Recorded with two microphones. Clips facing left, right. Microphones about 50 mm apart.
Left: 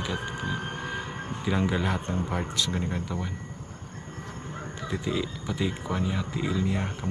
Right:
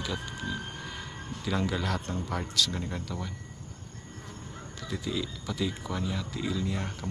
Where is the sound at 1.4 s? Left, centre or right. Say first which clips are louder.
Left 3 dB; left.